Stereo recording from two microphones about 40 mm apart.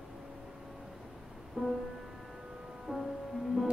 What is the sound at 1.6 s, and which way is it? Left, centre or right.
Music, centre.